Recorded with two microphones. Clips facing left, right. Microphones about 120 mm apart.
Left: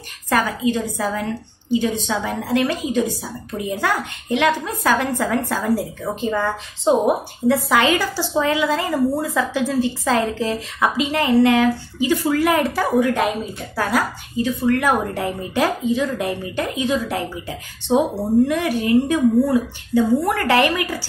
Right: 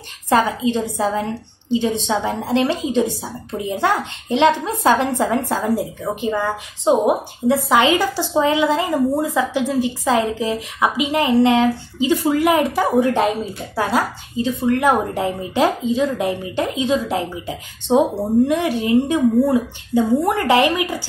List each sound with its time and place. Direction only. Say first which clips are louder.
0.3 s a woman's voice: right 2 dB; 25° right (ahead or behind)